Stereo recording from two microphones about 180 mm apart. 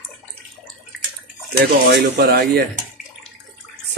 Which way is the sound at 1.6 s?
70° right (ahead or behind).